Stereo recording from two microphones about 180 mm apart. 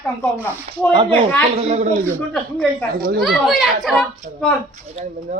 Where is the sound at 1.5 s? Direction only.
35° right (ahead or behind).